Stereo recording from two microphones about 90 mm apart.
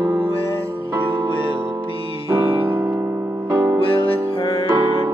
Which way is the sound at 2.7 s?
20° right (ahead or behind).